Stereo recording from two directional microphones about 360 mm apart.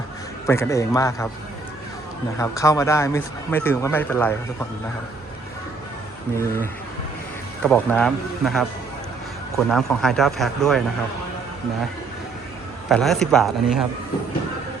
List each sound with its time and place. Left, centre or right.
0.4 s a man's voice: centre
2.4 s a man's voice: centre
7.6 s speech: centre
12.9 s speech: centre